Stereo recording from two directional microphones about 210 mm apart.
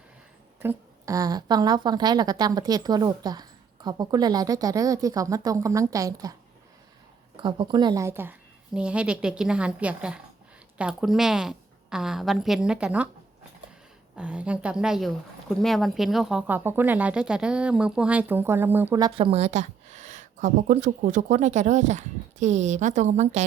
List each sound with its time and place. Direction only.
0.6 s a woman's voice: 15° right (ahead or behind)
7.3 s a woman's voice: 20° right (ahead or behind); by 13.1 s 5° right (ahead or behind)
14.2 s speech: 5° right (ahead or behind); by 23.4 s 30° right (ahead or behind)